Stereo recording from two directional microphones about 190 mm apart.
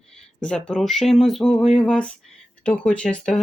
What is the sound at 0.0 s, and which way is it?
Speech, 5° left (ahead or behind).